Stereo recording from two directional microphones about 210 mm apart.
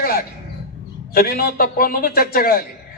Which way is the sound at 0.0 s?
45° left (ahead or behind).